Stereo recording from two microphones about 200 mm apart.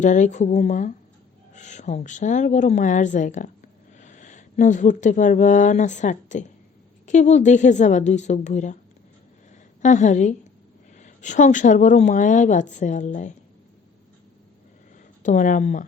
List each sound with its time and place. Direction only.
0.0 s a woman's voice: 40° left (ahead or behind)
9.8 s a woman's voice: 40° left (ahead or behind)
15.2 s a woman's voice: 40° left (ahead or behind)